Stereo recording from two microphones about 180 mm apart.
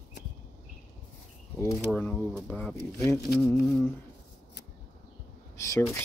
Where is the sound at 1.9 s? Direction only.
5° left (ahead or behind).